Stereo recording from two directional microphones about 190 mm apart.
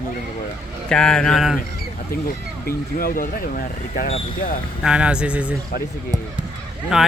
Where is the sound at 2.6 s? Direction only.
50° left (ahead or behind).